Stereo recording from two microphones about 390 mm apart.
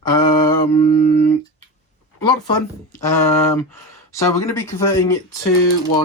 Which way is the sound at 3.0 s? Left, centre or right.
Centre.